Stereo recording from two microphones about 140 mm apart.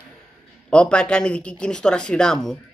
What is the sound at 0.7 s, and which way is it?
Speech, 5° left (ahead or behind).